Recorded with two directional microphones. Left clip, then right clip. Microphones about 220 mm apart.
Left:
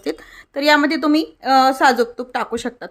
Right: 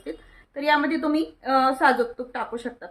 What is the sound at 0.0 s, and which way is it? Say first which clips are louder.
A woman's voice: left 10 dB; 50° left (ahead or behind).